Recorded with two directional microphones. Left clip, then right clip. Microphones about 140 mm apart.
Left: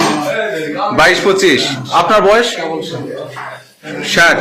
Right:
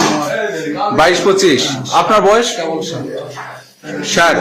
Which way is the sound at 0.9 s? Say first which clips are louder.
Left 1 dB; 15° right (ahead or behind).